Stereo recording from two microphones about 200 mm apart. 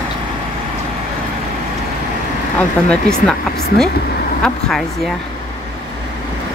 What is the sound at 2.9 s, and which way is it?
Speech, 5° left (ahead or behind).